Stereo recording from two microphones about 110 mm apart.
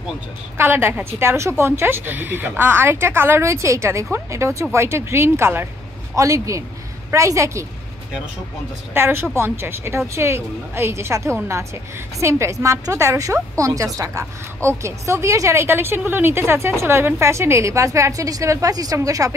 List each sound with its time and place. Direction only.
0.6 s a woman's voice: 20° right (ahead or behind)
8.9 s a woman's voice: 20° right (ahead or behind)